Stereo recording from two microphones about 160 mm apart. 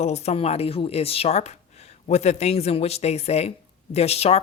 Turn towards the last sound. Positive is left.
turn(degrees=40)  # may be behind; listen again after turning